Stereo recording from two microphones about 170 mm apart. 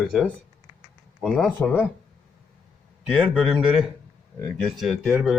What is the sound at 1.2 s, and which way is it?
Speech, centre (ahead or behind).